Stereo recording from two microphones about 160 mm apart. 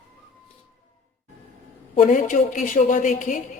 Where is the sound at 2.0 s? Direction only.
55° left (ahead or behind).